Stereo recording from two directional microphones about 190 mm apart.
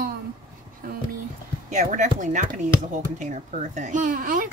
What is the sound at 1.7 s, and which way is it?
Speech, 40° right (ahead or behind).